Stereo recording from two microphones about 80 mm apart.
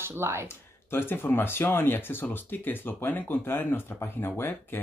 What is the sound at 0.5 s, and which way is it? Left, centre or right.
Speech, left.